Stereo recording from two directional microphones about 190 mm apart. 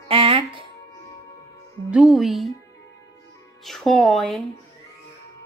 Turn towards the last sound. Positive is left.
turn(degrees=5)  # may be behind; listen again after turning